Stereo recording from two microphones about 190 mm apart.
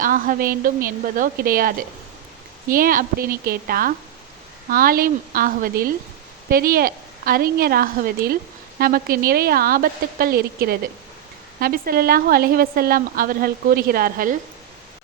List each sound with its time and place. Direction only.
0.0 s a woman's voice: 45° right (ahead or behind)